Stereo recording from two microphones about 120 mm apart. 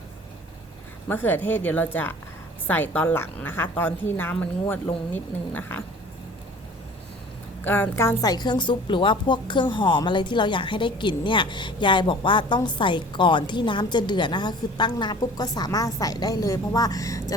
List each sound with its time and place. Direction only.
1.0 s a woman's voice: 15° left (ahead or behind)
7.6 s a woman's voice: 15° left (ahead or behind)